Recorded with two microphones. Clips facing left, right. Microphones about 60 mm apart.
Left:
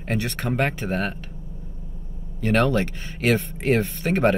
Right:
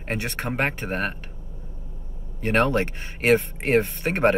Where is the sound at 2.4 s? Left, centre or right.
Right.